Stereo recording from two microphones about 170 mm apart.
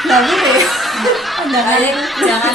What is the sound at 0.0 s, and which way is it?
Speech, centre (ahead or behind).